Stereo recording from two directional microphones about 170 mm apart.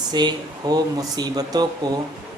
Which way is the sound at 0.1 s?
25° right (ahead or behind).